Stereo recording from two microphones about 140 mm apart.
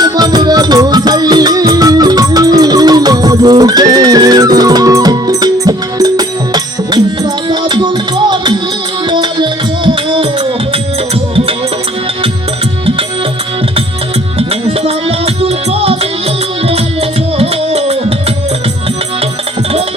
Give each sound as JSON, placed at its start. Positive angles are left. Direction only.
{"t": 0.0, "sound": "music", "side_deg": -30}
{"t": 14.3, "sound": "music", "side_deg": -45}
{"t": 17.3, "sound": "music", "side_deg": -45}